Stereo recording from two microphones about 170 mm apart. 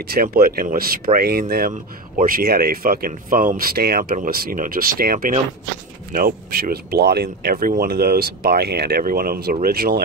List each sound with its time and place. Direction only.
0.0 s speech: 65° right (ahead or behind)